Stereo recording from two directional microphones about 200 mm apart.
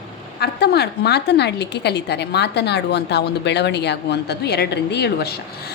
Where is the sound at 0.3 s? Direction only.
55° left (ahead or behind).